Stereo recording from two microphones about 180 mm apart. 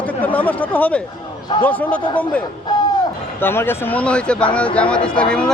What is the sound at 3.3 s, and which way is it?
A man's voice, 10° left (ahead or behind).